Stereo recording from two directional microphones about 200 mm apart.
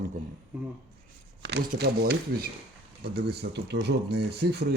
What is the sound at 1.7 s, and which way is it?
Speech, 55° right (ahead or behind).